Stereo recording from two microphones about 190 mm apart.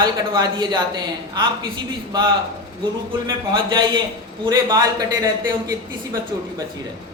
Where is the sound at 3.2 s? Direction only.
20° right (ahead or behind).